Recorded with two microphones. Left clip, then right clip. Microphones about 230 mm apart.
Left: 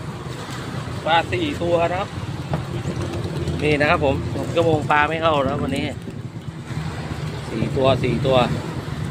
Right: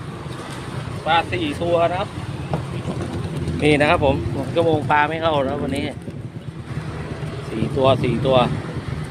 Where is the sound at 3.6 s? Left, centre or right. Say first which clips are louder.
Right 3 dB; right.